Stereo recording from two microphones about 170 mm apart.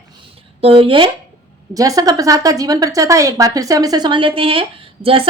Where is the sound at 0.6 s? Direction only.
30° right (ahead or behind).